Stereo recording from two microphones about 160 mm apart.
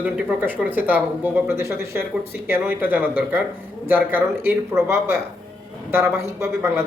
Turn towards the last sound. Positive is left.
turn(degrees=-15)  # may be behind; listen again after turning